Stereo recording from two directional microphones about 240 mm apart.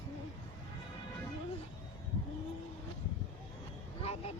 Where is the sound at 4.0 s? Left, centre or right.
Left.